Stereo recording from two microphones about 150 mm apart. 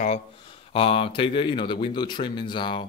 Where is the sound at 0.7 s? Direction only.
40° left (ahead or behind).